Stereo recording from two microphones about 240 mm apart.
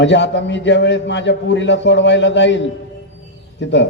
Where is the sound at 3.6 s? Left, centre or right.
Left.